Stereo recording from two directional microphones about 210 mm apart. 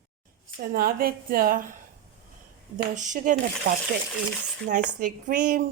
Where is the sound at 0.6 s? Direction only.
45° right (ahead or behind).